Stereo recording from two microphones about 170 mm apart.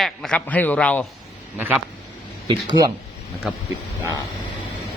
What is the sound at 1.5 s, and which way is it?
Speech, 10° right (ahead or behind).